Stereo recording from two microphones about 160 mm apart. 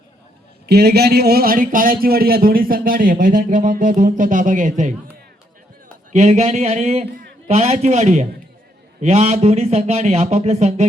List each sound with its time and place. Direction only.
0.7 s speech: 90° right; by 4.9 s 50° right (ahead or behind)
6.1 s speech: 45° right (ahead or behind)